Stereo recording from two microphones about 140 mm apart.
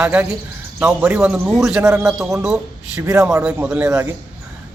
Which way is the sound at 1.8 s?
20° right (ahead or behind).